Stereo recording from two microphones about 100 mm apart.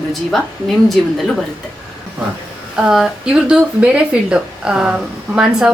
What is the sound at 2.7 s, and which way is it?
Speech, 5° right (ahead or behind).